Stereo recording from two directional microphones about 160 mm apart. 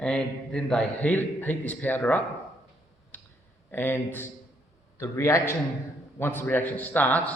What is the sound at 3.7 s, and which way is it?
A man's voice, 15° left (ahead or behind).